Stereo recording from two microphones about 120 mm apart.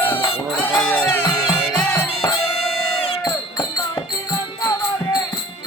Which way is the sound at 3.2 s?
35° left (ahead or behind).